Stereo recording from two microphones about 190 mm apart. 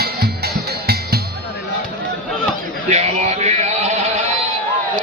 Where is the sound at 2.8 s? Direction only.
35° right (ahead or behind).